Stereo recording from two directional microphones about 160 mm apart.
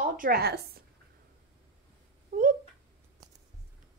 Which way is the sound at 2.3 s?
60° right (ahead or behind).